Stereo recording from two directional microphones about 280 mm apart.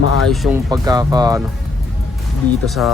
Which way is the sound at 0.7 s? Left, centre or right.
Centre.